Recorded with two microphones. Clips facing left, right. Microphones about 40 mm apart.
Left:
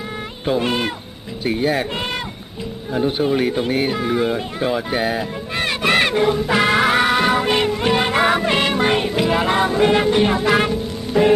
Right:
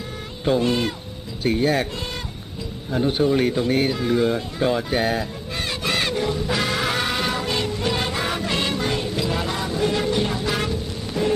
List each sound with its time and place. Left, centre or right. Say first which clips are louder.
0.6 s speech: left 1 dB; left
1.5 s speech: left 1 dB; centre
2.9 s speech: left 1 dB; centre
3.8 s speech: left 1 dB; left
5.5 s music: left 7 dB; left
11.1 s music: left 8 dB; left